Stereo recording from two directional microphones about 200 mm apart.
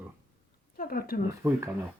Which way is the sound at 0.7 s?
45° left (ahead or behind).